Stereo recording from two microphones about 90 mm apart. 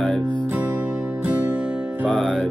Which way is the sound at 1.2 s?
15° right (ahead or behind).